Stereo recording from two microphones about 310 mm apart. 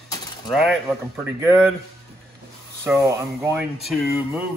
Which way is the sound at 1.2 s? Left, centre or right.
Centre.